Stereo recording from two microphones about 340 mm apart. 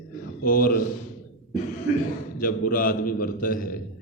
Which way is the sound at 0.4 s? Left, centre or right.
Left.